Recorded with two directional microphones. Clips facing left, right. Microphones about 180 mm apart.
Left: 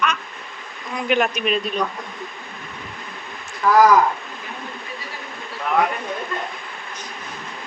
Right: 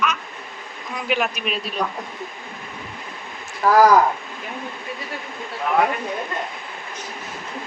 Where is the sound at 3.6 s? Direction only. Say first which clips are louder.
Even; 35° right (ahead or behind).